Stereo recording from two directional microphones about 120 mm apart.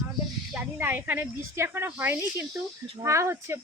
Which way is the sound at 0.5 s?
15° right (ahead or behind).